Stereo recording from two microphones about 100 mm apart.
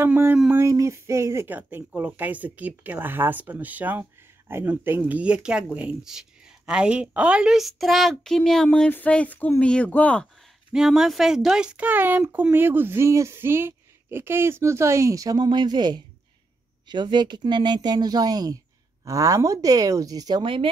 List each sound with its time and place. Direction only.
0.0 s speech: 20° right (ahead or behind)
1.5 s speech: 20° right (ahead or behind); by 10.2 s 15° left (ahead or behind)
10.7 s speech: 5° right (ahead or behind); by 20.4 s 40° right (ahead or behind)